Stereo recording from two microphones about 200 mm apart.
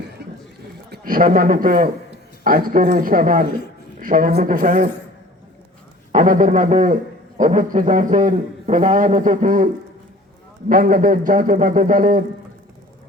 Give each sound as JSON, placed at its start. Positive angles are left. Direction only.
{"t": 0.2, "sound": "a sound", "side_deg": -55}
{"t": 0.9, "sound": "a man's voice", "side_deg": -45}
{"t": 6.1, "sound": "a man's voice", "side_deg": -40}
{"t": 10.7, "sound": "a man's voice", "side_deg": -45}